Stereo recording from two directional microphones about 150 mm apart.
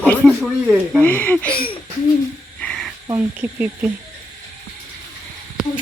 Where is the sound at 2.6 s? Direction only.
5° left (ahead or behind).